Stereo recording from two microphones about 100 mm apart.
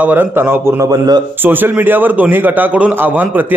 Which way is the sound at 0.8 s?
45° right (ahead or behind).